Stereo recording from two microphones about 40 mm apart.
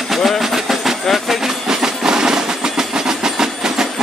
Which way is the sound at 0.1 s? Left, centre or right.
Centre.